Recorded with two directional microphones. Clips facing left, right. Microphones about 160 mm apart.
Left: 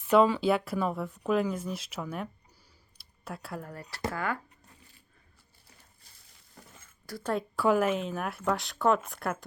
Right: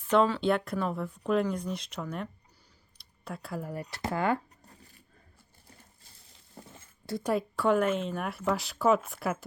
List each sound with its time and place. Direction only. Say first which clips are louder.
0.1 s speech: left 2 dB; 5° left (ahead or behind); by 4.4 s 25° right (ahead or behind)
6.6 s a sound: right 5 dB; 25° right (ahead or behind)
7.2 s a woman's voice: right 2 dB; 10° right (ahead or behind)
7.5 s speech: left 2 dB; 5° left (ahead or behind)